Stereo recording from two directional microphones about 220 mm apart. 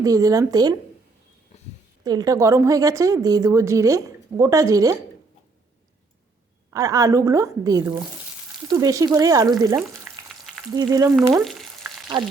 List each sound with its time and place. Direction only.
0.0 s speech: 15° right (ahead or behind)
2.0 s speech: 15° right (ahead or behind)
6.7 s speech: 15° right (ahead or behind)